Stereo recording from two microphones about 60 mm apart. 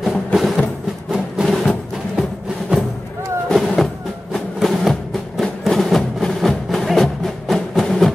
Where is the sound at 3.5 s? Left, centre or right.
Centre.